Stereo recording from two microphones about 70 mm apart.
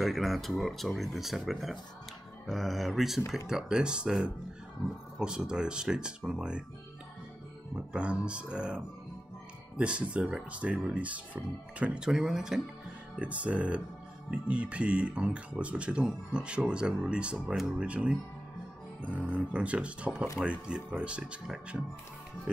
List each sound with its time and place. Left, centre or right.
0.0 s speech: centre
7.7 s speech: centre
13.2 s speech: centre